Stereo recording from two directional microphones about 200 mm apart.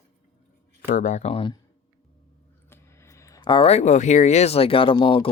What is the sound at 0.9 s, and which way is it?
Speech, 40° left (ahead or behind).